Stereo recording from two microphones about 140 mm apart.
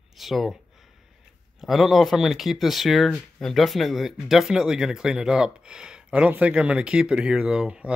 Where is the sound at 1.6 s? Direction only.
Centre (ahead or behind).